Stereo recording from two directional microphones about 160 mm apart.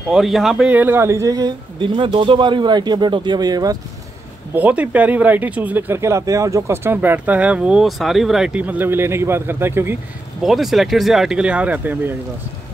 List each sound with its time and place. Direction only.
0.1 s speech: centre (ahead or behind); by 3.7 s 25° right (ahead or behind)
4.6 s speech: 10° right (ahead or behind)
10.4 s speech: centre (ahead or behind)